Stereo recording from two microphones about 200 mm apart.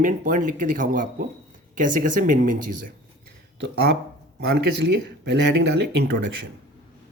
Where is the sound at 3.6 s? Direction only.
55° right (ahead or behind).